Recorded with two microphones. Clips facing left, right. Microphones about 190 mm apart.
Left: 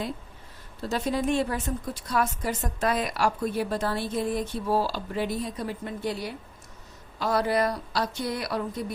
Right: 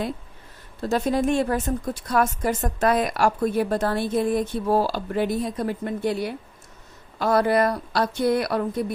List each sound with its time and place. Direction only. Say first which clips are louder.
0.8 s a woman's voice: right 5 dB; 50° right (ahead or behind)